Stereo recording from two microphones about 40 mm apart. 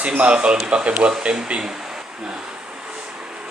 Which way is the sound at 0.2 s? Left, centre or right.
Right.